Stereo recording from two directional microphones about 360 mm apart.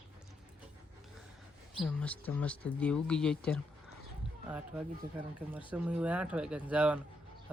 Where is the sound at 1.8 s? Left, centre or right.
Centre.